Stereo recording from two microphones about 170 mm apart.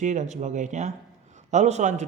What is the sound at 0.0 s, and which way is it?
Speech, 45° right (ahead or behind).